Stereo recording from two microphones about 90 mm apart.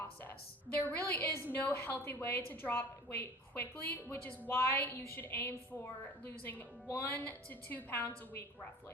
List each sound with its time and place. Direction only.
0.8 s a woman's voice: 15° left (ahead or behind)